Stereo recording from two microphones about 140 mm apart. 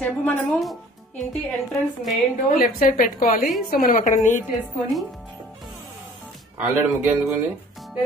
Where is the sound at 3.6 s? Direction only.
90° left.